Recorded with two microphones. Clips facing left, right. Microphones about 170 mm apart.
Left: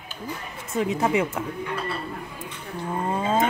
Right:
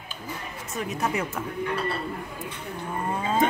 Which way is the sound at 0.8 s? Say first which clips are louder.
Left 6 dB; 20° left (ahead or behind).